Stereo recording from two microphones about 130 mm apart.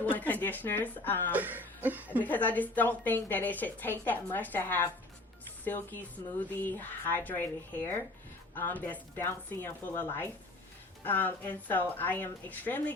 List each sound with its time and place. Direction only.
0.0 s a woman's voice: 15° left (ahead or behind)
1.3 s music: 15° right (ahead or behind)
2.2 s a woman's voice: 15° left (ahead or behind)